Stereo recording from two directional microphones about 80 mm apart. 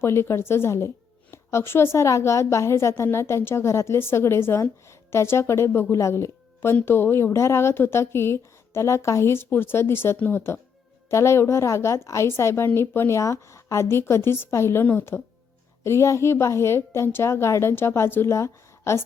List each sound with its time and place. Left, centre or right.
0.0 s a woman's voice: left
11.1 s a woman's voice: left
15.8 s a woman's voice: left